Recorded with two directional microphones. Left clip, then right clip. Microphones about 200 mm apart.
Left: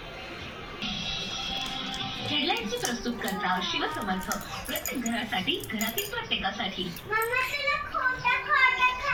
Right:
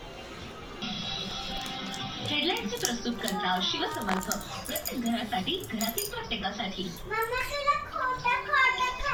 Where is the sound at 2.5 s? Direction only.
25° right (ahead or behind).